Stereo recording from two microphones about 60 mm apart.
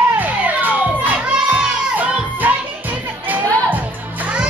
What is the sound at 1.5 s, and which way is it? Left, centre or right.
Children shouting, right.